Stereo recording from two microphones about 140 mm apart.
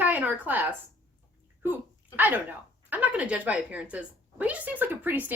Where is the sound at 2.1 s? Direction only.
15° right (ahead or behind).